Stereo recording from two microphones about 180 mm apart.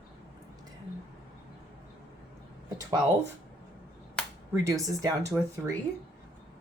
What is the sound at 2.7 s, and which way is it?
Speech, 20° right (ahead or behind).